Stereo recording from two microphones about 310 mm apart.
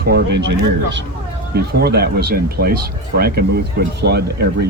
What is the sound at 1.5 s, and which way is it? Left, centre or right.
Speech, right.